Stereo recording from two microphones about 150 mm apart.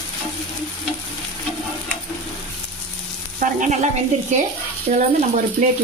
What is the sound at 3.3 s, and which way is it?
Speech, 60° right (ahead or behind).